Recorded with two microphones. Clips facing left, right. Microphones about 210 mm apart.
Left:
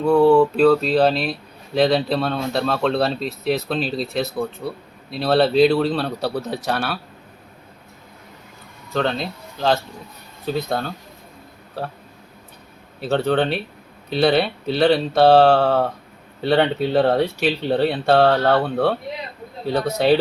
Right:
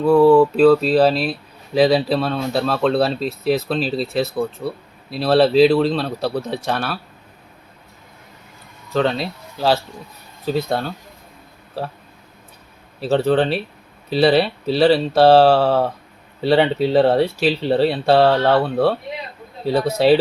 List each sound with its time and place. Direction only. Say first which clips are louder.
0.0 s speech: right 2 dB; centre (ahead or behind)
8.9 s speech: right 3 dB; centre (ahead or behind)
13.1 s speech: right 3 dB; centre (ahead or behind)